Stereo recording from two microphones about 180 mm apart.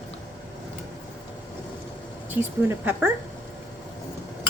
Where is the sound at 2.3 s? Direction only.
10° right (ahead or behind).